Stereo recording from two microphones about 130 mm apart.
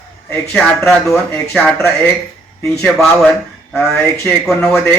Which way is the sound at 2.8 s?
5° left (ahead or behind).